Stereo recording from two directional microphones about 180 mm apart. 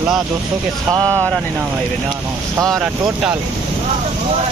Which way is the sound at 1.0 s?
5° left (ahead or behind).